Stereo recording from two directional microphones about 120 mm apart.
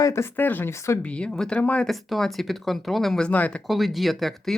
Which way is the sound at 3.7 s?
Centre (ahead or behind).